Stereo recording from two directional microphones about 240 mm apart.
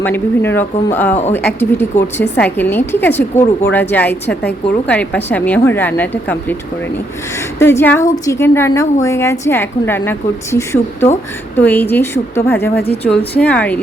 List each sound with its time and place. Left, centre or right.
0.0 s a woman's voice: centre
7.6 s a woman's voice: centre